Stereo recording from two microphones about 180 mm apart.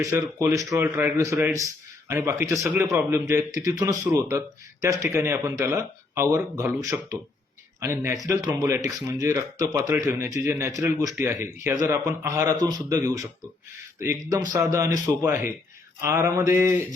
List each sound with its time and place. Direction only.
0.0 s speech: 15° right (ahead or behind)